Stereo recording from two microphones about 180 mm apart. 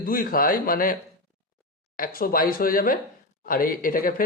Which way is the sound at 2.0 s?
55° left (ahead or behind).